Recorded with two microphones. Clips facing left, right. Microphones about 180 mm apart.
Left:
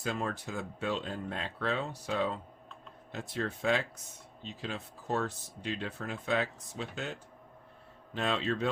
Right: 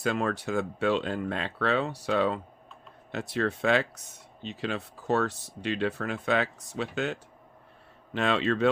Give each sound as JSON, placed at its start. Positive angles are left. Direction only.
{"t": 0.0, "sound": "speech", "side_deg": -75}